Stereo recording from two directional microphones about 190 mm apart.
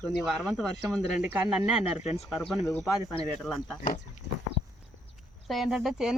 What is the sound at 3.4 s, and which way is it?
Speech, 5° left (ahead or behind).